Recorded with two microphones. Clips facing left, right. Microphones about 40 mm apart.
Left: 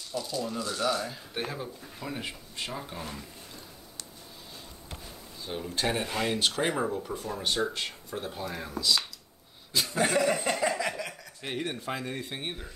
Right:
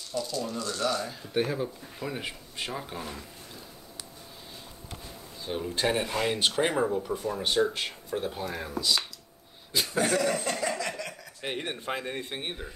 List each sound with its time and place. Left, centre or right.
0.1 s speech: centre
5.4 s speech: centre
10.3 s a sound: centre
11.4 s speech: centre